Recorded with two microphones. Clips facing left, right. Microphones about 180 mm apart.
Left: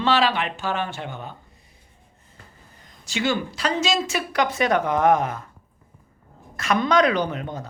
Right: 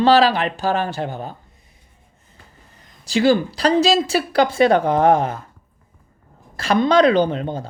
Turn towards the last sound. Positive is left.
turn(degrees=-30)  # may be behind; listen again after turning